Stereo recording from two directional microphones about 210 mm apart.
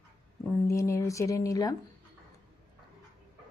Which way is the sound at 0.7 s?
15° left (ahead or behind).